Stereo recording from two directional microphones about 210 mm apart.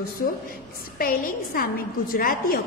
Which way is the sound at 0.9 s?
45° left (ahead or behind).